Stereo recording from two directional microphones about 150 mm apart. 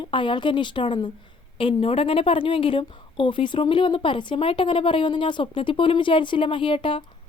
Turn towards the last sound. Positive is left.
turn(degrees=35)  # may be behind; listen again after turning